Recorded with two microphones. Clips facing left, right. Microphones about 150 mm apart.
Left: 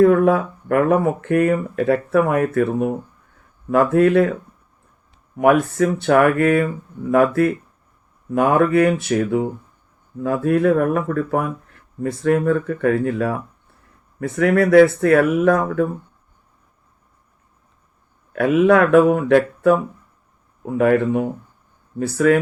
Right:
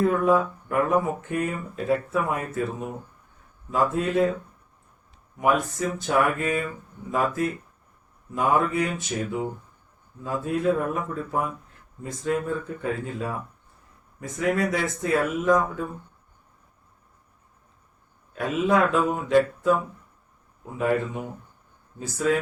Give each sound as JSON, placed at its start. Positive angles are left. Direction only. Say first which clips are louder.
{"t": 0.0, "sound": "speech", "louder": "left 7 dB", "side_deg": 65}
{"t": 5.4, "sound": "speech", "louder": "left 8 dB", "side_deg": 65}
{"t": 18.3, "sound": "speech", "louder": "left 8 dB", "side_deg": 65}